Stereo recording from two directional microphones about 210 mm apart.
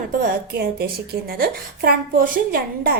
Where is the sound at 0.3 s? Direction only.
45° right (ahead or behind).